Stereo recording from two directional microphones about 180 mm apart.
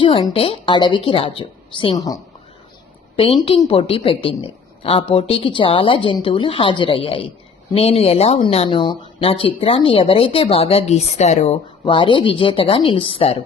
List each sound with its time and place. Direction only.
0.3 s speech: 30° left (ahead or behind)
3.7 s speech: 30° left (ahead or behind)